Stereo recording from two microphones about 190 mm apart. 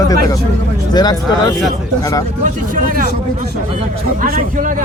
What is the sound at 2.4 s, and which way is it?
Speech, 45° right (ahead or behind).